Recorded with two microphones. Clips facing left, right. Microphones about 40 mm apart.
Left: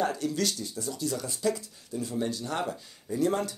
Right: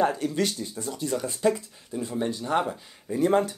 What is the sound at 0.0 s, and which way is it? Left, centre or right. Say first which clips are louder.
Speech: right 4 dB; right.